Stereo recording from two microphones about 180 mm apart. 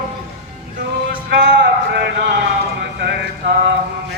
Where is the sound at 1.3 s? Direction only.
70° right (ahead or behind).